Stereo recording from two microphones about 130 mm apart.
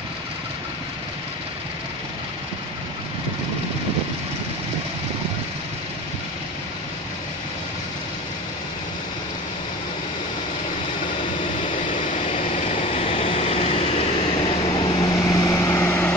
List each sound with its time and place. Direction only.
12.1 s vehicle: 60° left (ahead or behind); by 15.0 s 35° left (ahead or behind)
15.1 s vehicle: 25° left (ahead or behind)